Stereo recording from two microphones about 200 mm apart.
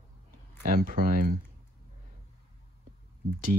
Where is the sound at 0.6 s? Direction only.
45° right (ahead or behind).